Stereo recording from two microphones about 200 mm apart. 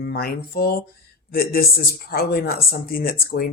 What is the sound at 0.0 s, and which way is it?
Speech, 50° left (ahead or behind).